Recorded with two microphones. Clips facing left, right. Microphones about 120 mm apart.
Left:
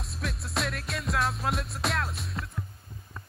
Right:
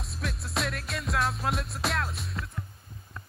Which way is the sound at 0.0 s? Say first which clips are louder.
Even; centre (ahead or behind).